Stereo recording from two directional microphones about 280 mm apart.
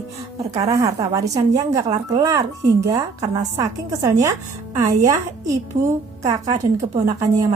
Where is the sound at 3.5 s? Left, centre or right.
Centre.